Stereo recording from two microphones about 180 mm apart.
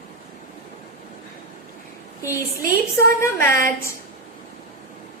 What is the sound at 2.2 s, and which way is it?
Speech, 15° left (ahead or behind).